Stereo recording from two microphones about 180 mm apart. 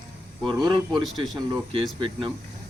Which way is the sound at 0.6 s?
25° right (ahead or behind).